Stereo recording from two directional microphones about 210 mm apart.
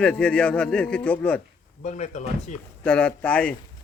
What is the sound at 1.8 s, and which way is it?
Speech, 35° left (ahead or behind).